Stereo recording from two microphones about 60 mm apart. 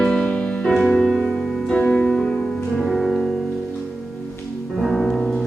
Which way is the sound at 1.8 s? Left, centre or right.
Centre.